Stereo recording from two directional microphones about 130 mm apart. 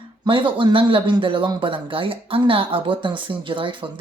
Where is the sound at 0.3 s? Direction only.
40° right (ahead or behind).